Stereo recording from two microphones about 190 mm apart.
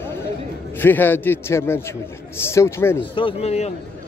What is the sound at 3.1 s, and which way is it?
Speech, 30° left (ahead or behind).